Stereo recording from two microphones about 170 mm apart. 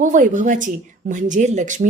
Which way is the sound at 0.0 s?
50° right (ahead or behind).